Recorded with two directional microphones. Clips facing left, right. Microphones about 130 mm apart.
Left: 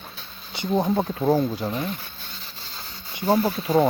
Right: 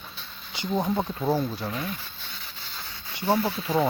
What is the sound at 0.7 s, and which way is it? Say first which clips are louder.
Speech: left 4 dB; 25° left (ahead or behind).